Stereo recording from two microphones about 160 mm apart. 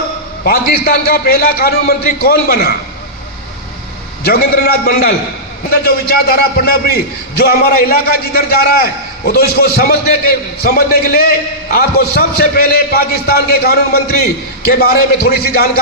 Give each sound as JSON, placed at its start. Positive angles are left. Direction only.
{"t": 0.4, "sound": "a man's voice", "side_deg": 70}
{"t": 4.3, "sound": "a man's voice", "side_deg": 70}